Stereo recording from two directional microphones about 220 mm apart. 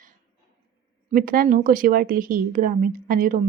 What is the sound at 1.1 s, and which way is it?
A woman's voice, 40° right (ahead or behind).